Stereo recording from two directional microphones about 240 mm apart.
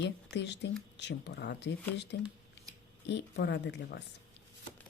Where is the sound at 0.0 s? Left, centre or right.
Left.